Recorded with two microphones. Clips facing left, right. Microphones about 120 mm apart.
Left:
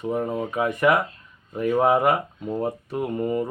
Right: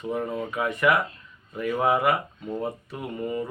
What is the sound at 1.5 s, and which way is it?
Speech, 30° left (ahead or behind).